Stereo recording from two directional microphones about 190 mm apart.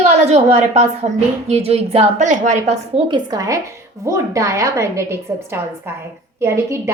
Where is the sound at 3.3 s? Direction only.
15° right (ahead or behind).